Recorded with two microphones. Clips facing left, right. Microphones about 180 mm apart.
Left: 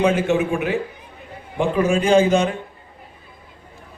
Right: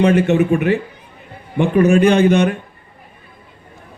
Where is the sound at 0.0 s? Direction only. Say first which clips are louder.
Right 4 dB; 65° right (ahead or behind).